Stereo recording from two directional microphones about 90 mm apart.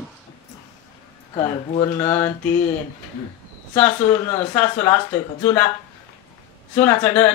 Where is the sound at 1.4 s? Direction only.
65° left (ahead or behind).